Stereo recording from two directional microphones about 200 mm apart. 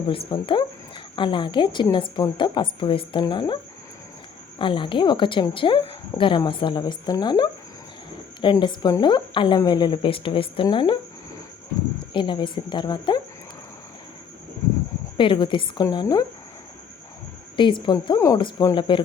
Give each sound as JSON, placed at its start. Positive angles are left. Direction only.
{"t": 0.3, "sound": "speech", "side_deg": 25}
{"t": 12.1, "sound": "speech", "side_deg": 25}
{"t": 15.2, "sound": "speech", "side_deg": 25}
{"t": 17.6, "sound": "speech", "side_deg": 25}